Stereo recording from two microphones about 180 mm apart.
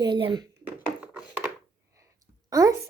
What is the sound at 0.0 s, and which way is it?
Speech, 25° right (ahead or behind).